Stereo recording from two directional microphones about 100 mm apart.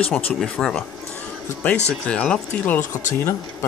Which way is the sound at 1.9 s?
10° left (ahead or behind).